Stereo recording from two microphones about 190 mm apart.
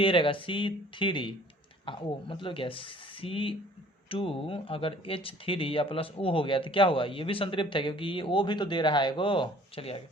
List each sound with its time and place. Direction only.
0.0 s speech: 25° left (ahead or behind)